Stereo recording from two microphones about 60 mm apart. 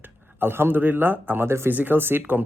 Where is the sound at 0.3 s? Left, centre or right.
Right.